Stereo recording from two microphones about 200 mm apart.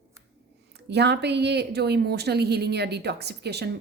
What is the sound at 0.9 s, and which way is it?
A woman's voice, 55° right (ahead or behind).